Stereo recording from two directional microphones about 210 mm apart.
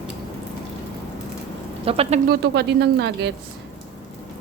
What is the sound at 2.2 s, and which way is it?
Speech, 50° right (ahead or behind).